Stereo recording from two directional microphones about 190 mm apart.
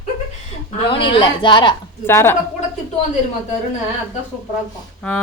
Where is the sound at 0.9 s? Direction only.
25° left (ahead or behind).